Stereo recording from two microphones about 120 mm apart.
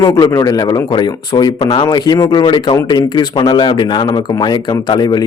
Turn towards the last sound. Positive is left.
turn(degrees=35)  # may be behind; listen again after turning